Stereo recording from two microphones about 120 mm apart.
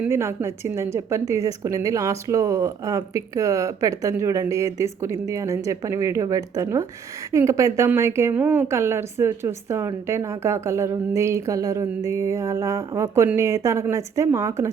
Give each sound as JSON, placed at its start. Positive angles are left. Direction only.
{"t": 0.1, "sound": "a woman's voice", "side_deg": -20}